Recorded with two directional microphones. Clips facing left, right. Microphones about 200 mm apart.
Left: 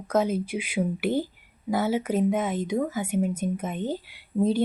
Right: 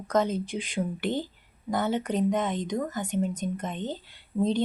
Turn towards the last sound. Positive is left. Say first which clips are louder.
# left 2 dB
turn(degrees=10)  # may be behind; listen again after turning